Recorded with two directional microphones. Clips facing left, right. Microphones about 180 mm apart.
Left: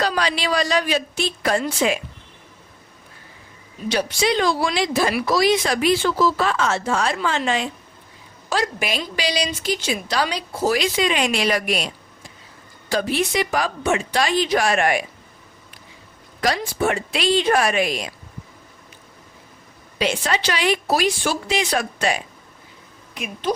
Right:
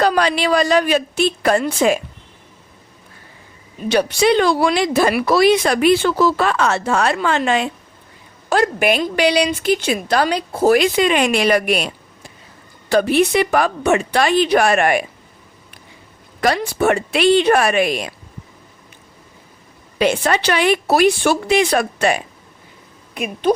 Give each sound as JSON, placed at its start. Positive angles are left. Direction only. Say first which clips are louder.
{"t": 0.0, "sound": "a woman's voice", "louder": "right 6 dB", "side_deg": -55}
{"t": 3.8, "sound": "speech", "louder": "right 6 dB", "side_deg": -60}
{"t": 12.9, "sound": "speech", "louder": "right 7 dB", "side_deg": -60}
{"t": 16.4, "sound": "speech", "louder": "right 4 dB", "side_deg": -60}
{"t": 20.0, "sound": "speech", "louder": "right 6 dB", "side_deg": -55}